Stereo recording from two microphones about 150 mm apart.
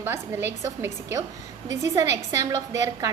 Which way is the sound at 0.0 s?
15° right (ahead or behind).